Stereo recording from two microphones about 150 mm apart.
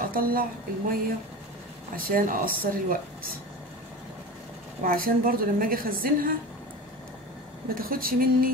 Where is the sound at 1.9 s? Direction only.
70° right (ahead or behind).